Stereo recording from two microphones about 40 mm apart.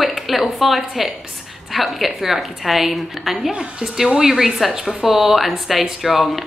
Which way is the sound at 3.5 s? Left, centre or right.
Centre.